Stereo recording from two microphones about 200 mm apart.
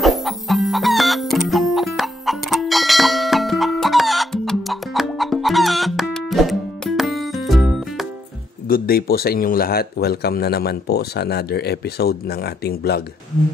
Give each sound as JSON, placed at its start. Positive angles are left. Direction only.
{"t": 0.0, "sound": "chicken", "side_deg": 0}
{"t": 8.6, "sound": "speech", "side_deg": 45}